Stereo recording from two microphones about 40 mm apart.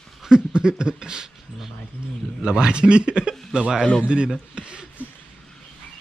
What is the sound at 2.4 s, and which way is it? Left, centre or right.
Speech, right.